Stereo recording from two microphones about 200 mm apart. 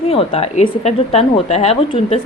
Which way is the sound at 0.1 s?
30° left (ahead or behind).